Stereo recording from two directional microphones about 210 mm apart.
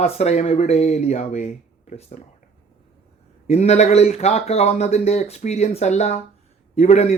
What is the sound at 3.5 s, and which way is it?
Speech, 30° left (ahead or behind).